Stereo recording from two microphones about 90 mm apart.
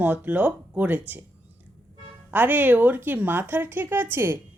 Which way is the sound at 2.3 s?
20° right (ahead or behind).